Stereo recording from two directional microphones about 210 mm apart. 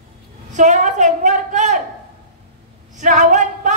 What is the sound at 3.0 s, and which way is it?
Speech, 35° right (ahead or behind).